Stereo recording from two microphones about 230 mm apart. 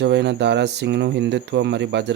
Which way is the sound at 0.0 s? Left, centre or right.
Right.